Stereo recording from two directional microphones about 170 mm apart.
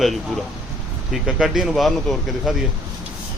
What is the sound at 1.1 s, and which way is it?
A man's voice, centre (ahead or behind).